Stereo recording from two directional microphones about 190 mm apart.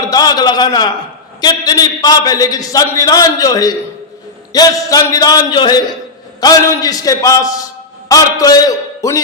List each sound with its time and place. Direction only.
0.0 s a man's voice: 20° left (ahead or behind)